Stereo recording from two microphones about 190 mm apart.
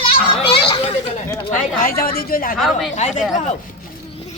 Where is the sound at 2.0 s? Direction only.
50° left (ahead or behind).